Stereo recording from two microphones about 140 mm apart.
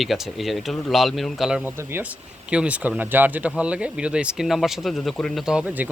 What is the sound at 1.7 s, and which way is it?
Speech, 15° right (ahead or behind).